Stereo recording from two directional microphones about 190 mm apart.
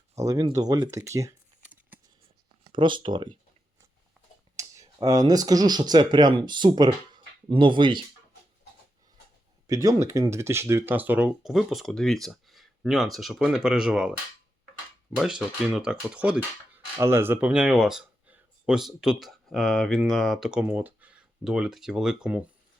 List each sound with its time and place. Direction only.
0.2 s speech: 20° right (ahead or behind)
2.6 s speech: 25° right (ahead or behind)
4.5 s speech: 15° right (ahead or behind)
9.6 s speech: 20° right (ahead or behind)